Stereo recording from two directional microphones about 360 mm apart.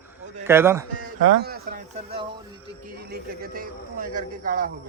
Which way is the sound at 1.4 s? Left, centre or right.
Right.